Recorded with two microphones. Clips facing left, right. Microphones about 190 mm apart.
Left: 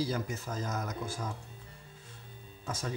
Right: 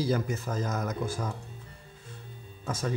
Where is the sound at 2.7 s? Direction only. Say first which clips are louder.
Right 5 dB; 55° right (ahead or behind).